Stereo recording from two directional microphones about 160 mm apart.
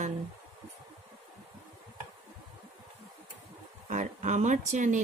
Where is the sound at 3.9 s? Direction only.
50° right (ahead or behind).